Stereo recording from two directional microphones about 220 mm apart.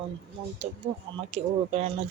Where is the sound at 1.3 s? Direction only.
30° right (ahead or behind).